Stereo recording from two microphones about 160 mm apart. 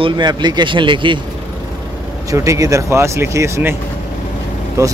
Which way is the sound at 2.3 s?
20° right (ahead or behind).